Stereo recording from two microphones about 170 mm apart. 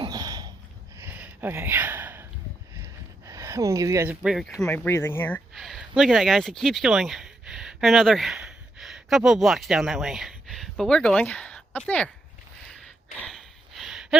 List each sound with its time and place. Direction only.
0.0 s a sound: 25° right (ahead or behind)
4.1 s speech: 5° right (ahead or behind)
4.9 s speech: 15° left (ahead or behind)
5.5 s speech: centre (ahead or behind)
13.1 s gasp: 5° left (ahead or behind)